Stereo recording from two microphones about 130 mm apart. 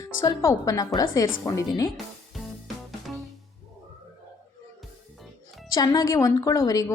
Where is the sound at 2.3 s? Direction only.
Centre (ahead or behind).